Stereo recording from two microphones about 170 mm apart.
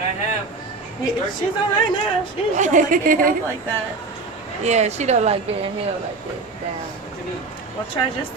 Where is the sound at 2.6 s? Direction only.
45° right (ahead or behind).